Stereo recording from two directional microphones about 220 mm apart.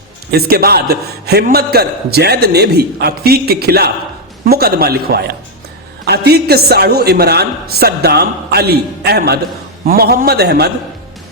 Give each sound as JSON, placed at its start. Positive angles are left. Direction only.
{"t": 0.3, "sound": "a woman's voice", "side_deg": -45}